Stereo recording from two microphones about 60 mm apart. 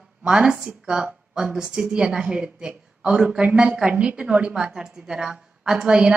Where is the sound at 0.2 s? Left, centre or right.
Centre.